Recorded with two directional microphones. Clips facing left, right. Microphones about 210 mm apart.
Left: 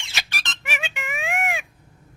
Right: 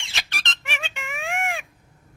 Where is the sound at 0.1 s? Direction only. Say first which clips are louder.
Even; 5° left (ahead or behind).